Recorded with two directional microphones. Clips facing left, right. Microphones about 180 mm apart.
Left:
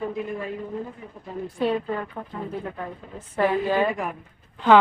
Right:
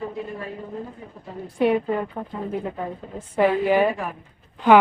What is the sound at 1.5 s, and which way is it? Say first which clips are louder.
Speech: right 5 dB; 15° right (ahead or behind).